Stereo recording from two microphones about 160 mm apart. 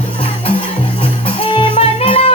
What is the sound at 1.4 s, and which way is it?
Music, 35° left (ahead or behind).